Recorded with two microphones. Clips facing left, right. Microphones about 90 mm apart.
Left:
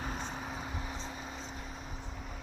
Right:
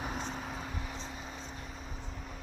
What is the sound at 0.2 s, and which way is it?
Vehicle, 5° left (ahead or behind).